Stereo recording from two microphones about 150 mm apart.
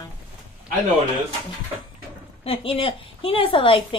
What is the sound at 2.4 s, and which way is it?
A woman's voice, 35° left (ahead or behind).